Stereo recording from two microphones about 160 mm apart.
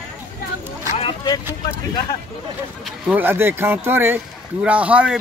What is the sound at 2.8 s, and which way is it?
Speech, 10° right (ahead or behind).